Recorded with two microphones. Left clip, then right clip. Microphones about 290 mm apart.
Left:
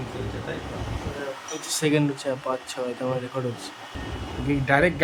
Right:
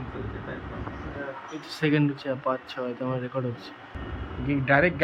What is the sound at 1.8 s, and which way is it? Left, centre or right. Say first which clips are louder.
Speech: left 1 dB; centre.